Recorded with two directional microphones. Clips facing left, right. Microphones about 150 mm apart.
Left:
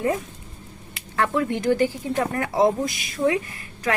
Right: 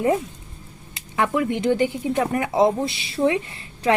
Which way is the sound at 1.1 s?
15° right (ahead or behind).